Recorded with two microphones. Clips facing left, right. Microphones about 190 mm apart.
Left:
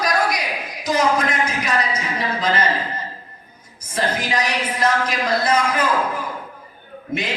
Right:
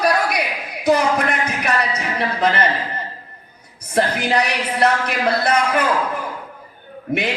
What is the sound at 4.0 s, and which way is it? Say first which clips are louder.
A woman's voice: right 4 dB; 65° right (ahead or behind).